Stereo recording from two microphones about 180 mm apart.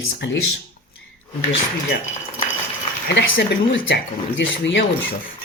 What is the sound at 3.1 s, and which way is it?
Speech, 80° left.